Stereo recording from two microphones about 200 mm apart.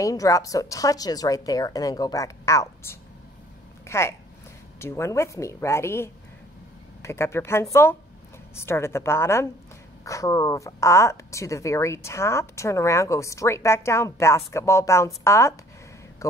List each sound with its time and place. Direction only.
0.0 s speech: 15° left (ahead or behind)
16.2 s mantra: 15° left (ahead or behind)